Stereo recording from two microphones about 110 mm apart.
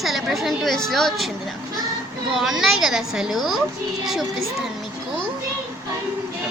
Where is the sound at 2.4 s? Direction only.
5° right (ahead or behind).